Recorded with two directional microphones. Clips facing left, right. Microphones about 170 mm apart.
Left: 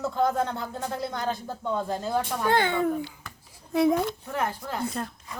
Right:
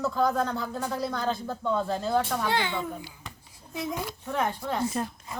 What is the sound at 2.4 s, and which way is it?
Speech, 50° left (ahead or behind).